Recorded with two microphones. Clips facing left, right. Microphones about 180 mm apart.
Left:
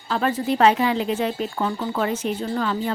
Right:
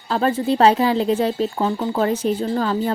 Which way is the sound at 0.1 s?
30° right (ahead or behind).